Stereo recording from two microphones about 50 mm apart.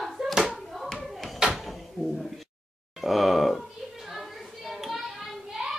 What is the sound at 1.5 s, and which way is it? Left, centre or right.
Drawer open or close, centre.